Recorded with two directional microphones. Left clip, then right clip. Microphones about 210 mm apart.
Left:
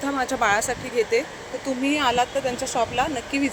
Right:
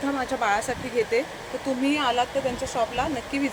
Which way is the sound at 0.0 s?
25° left (ahead or behind).